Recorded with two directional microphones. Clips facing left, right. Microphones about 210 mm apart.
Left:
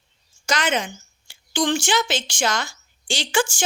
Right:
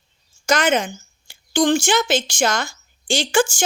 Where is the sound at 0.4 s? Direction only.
50° right (ahead or behind).